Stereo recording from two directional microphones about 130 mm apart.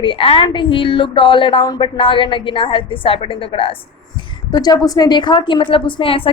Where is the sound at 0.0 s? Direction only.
40° left (ahead or behind).